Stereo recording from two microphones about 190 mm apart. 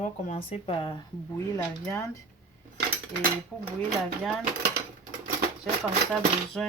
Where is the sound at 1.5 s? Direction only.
15° left (ahead or behind).